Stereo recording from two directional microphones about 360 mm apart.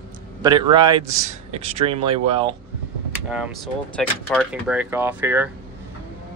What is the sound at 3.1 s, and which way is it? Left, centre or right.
Speech, centre.